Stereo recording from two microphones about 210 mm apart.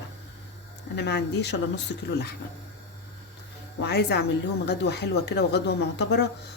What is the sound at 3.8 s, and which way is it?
Speech, 50° left (ahead or behind).